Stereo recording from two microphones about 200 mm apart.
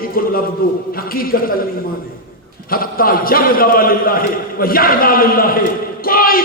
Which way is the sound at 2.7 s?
45° left (ahead or behind).